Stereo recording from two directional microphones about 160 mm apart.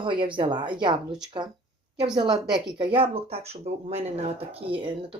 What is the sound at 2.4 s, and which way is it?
Speech, 5° right (ahead or behind).